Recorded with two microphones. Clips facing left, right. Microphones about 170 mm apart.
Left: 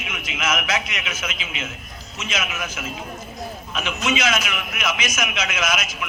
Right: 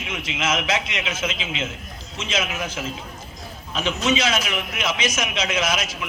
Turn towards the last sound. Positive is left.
turn(degrees=-30)  # may be behind; listen again after turning